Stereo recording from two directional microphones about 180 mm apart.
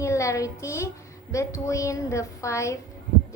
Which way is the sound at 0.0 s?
15° left (ahead or behind).